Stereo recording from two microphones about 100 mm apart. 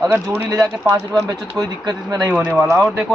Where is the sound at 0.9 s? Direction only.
35° right (ahead or behind).